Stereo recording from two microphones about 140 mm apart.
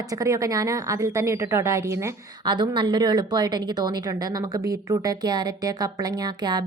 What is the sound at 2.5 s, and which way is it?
A woman's voice, 30° right (ahead or behind).